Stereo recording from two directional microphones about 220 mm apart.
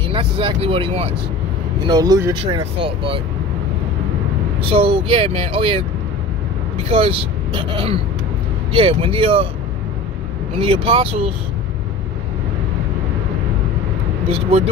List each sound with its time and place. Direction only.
0.1 s speech: 25° right (ahead or behind)
4.6 s speech: 25° right (ahead or behind)
6.9 s speech: 25° right (ahead or behind)
10.6 s speech: 25° right (ahead or behind)
14.2 s speech: 25° right (ahead or behind)